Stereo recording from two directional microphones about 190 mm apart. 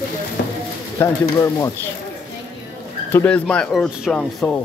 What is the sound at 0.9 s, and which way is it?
Speech, 15° left (ahead or behind).